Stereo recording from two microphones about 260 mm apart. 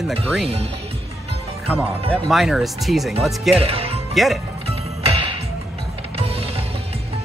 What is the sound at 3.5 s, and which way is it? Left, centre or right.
Speech, right.